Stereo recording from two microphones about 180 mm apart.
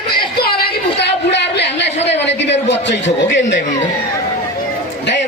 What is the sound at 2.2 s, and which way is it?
A man's voice, 75° left (ahead or behind).